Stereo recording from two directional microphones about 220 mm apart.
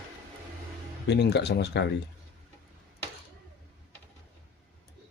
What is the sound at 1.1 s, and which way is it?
Speech, 50° left (ahead or behind).